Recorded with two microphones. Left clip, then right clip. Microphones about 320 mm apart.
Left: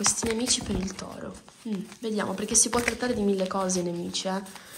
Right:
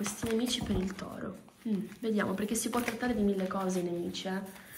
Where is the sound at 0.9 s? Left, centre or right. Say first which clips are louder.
Left 3 dB; centre.